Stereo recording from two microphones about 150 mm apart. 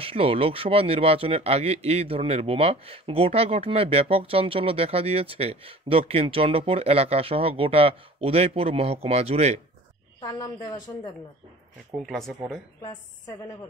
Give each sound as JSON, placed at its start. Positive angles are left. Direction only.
{"t": 0.0, "sound": "speech", "side_deg": -40}
{"t": 10.2, "sound": "a woman's voice", "side_deg": 30}
{"t": 12.1, "sound": "speech", "side_deg": 5}